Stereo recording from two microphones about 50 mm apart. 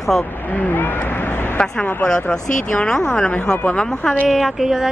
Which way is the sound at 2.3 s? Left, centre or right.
Centre.